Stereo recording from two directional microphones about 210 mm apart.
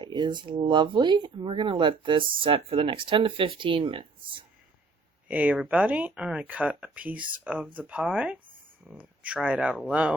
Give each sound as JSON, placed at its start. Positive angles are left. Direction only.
{"t": 0.0, "sound": "speech", "side_deg": -20}
{"t": 5.3, "sound": "speech", "side_deg": -5}